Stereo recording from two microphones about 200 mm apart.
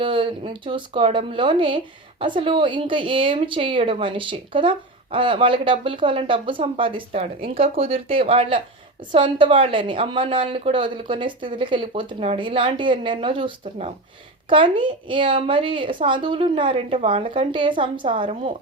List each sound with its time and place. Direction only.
0.0 s a woman's voice: 25° right (ahead or behind)